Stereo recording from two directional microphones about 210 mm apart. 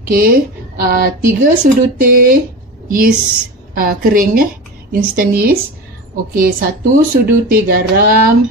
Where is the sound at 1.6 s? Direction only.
40° right (ahead or behind).